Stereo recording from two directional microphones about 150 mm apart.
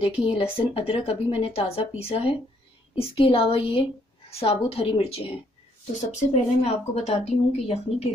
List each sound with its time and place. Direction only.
0.0 s speech: 40° left (ahead or behind)
5.9 s speech: 50° left (ahead or behind)